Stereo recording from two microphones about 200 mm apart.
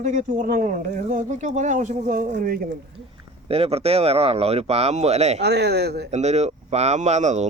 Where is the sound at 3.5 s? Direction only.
30° right (ahead or behind).